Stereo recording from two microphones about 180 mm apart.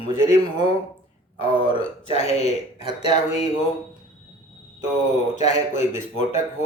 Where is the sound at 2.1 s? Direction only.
35° left (ahead or behind).